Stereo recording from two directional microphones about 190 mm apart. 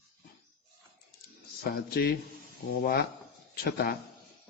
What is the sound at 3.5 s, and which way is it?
Speech, 55° left (ahead or behind).